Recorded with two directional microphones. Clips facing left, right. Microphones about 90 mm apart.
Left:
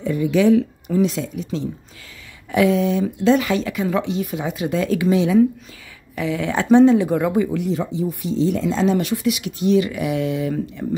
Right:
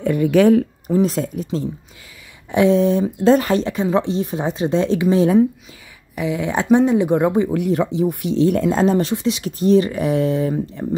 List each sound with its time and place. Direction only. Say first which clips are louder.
0.0 s speech: right 3 dB; 60° right (ahead or behind); by 1.7 s 40° right (ahead or behind)
2.5 s speech: right 3 dB; 30° right (ahead or behind)
5.1 s speech: right 3 dB; 40° right (ahead or behind)
6.1 s speech: right 1 dB; 20° right (ahead or behind)
7.5 s speech: right 4 dB; 60° right (ahead or behind)
8.9 s speech: right 1 dB; 30° right (ahead or behind)